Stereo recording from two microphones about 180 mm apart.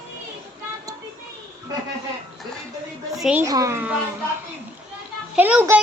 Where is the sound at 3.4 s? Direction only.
15° right (ahead or behind).